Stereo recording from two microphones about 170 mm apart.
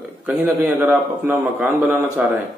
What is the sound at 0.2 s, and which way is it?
A man's voice, 5° right (ahead or behind).